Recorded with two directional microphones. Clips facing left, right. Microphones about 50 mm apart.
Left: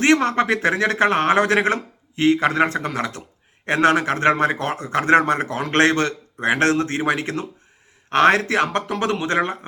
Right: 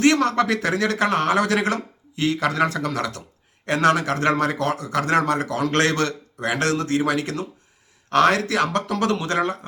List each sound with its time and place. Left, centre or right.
0.0 s a man's voice: left